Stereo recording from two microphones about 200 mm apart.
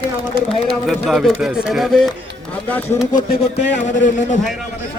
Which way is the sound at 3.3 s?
60° left (ahead or behind).